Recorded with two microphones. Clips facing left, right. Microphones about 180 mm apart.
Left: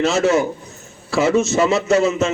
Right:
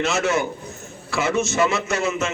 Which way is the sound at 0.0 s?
35° left (ahead or behind).